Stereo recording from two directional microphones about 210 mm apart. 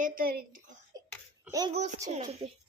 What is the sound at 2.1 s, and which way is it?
Speech, 30° right (ahead or behind).